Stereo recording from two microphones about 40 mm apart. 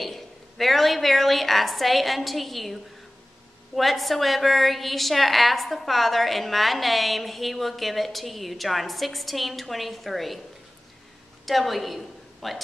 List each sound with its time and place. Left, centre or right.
0.0 s a woman's voice: centre
11.4 s a woman's voice: centre